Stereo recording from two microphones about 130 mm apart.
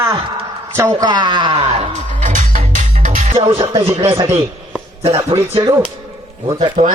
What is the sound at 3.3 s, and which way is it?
Speech, 45° right (ahead or behind).